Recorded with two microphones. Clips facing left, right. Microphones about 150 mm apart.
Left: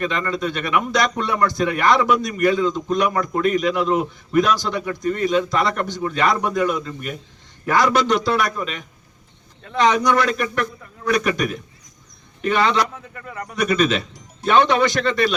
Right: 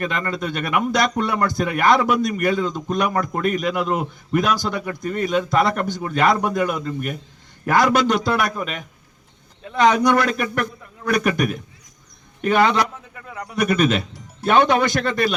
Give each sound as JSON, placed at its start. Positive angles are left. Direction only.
{"t": 0.0, "sound": "a man's voice", "side_deg": -50}
{"t": 13.1, "sound": "speech", "side_deg": -5}
{"t": 13.6, "sound": "a man's voice", "side_deg": -55}